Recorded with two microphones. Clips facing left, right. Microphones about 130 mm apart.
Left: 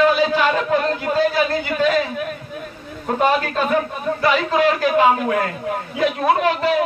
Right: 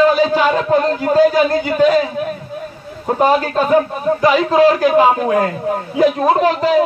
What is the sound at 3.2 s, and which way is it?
A man's voice, 35° right (ahead or behind).